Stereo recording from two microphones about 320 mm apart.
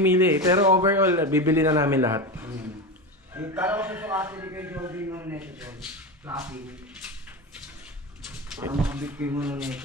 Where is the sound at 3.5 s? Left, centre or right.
Centre.